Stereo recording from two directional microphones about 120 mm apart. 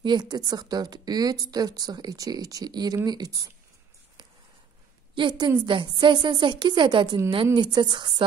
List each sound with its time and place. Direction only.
0.0 s a woman's voice: 35° right (ahead or behind)
5.1 s a woman's voice: 45° right (ahead or behind)